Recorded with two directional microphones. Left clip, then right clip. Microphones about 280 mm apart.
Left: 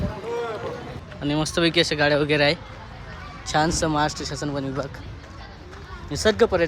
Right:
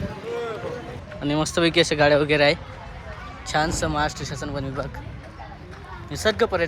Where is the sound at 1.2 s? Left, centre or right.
Centre.